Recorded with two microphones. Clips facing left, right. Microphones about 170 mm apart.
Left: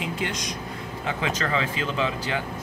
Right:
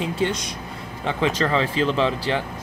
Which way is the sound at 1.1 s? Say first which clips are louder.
Right 5 dB; 30° right (ahead or behind).